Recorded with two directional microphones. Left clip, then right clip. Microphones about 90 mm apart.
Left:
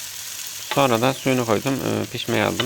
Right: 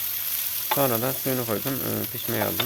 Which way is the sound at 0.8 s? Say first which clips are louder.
Left 8 dB; 45° left (ahead or behind).